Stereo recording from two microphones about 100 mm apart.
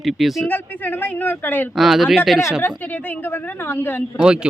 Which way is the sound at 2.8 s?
15° left (ahead or behind).